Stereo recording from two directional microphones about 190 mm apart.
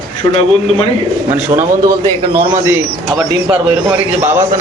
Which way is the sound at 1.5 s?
20° right (ahead or behind).